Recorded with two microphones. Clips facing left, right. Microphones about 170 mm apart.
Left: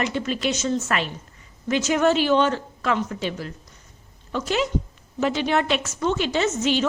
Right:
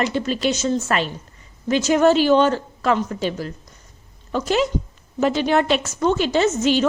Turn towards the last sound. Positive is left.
turn(degrees=-40)  # may be behind; listen again after turning